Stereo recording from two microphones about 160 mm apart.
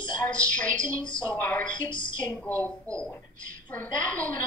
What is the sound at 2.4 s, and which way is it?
Speech, 10° left (ahead or behind).